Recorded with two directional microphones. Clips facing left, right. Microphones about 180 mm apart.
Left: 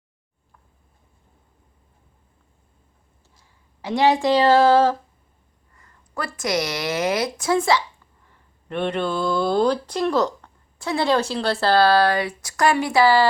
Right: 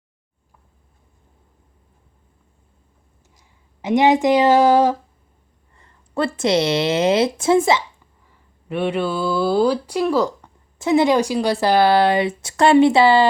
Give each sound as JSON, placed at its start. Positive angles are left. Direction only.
{"t": 3.3, "sound": "speech", "side_deg": -20}
{"t": 5.7, "sound": "a woman's voice", "side_deg": -30}
{"t": 8.3, "sound": "speech", "side_deg": -5}
{"t": 10.8, "sound": "speech", "side_deg": -20}